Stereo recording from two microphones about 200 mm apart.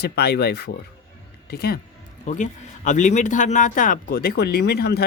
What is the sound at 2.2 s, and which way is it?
Speech, 40° left (ahead or behind).